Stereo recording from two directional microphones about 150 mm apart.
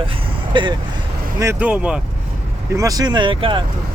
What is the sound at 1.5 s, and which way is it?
Speech, 5° right (ahead or behind).